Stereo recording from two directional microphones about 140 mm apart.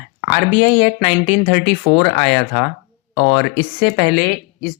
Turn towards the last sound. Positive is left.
turn(degrees=30)  # may be behind; listen again after turning